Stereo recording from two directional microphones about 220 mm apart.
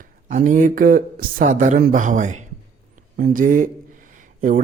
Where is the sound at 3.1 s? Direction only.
40° right (ahead or behind).